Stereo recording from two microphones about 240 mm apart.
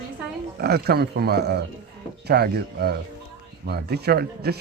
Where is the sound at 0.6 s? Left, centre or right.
Right.